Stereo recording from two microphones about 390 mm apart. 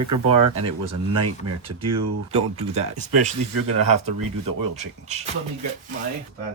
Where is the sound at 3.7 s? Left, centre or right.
Right.